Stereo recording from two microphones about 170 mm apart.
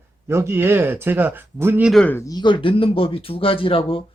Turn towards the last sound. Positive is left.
turn(degrees=30)  # may be behind; listen again after turning